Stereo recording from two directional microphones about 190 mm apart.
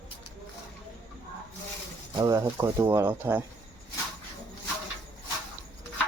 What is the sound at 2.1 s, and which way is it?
Speech, 20° right (ahead or behind).